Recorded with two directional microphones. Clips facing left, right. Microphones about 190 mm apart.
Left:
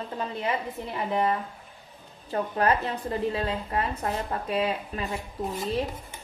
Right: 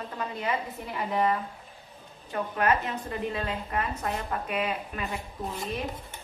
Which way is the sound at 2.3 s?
35° left (ahead or behind).